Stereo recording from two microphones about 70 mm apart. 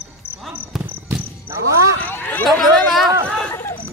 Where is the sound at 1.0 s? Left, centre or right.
Right.